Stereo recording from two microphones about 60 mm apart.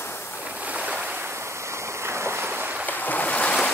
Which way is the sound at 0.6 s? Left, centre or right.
Right.